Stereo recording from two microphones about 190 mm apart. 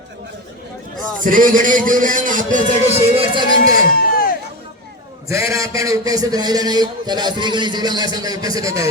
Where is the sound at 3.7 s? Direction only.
50° left (ahead or behind).